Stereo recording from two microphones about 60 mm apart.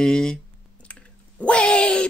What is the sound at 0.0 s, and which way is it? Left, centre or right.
Speech, centre.